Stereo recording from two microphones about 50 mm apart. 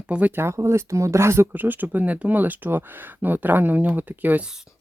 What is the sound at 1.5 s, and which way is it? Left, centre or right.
Speech, right.